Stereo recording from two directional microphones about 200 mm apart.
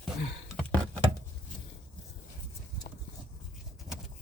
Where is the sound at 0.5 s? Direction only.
5° left (ahead or behind).